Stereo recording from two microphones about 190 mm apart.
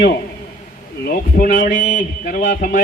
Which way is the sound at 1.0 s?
55° left (ahead or behind).